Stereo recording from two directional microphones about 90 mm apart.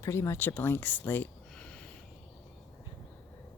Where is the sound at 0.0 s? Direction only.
30° left (ahead or behind).